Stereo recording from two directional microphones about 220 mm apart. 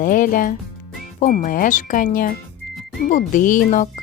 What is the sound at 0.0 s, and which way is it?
Speech, 40° left (ahead or behind).